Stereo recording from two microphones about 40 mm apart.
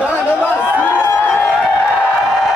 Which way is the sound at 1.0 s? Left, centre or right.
Left.